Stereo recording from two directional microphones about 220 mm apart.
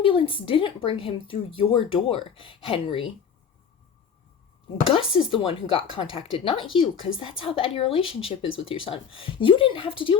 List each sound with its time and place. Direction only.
0.0 s speech: 25° left (ahead or behind)
4.9 s speech: 25° left (ahead or behind)